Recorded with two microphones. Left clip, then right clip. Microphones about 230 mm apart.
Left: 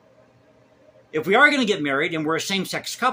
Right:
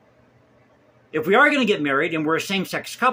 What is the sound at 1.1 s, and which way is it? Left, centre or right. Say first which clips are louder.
Speech: even; centre.